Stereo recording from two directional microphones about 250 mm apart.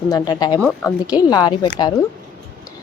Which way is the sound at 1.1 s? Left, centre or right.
Centre.